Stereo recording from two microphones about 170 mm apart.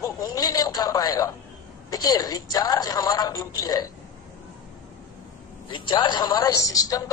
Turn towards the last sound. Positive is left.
turn(degrees=20)  # may be behind; listen again after turning